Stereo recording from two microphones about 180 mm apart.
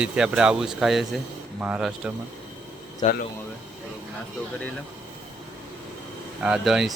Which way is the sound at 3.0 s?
35° left (ahead or behind).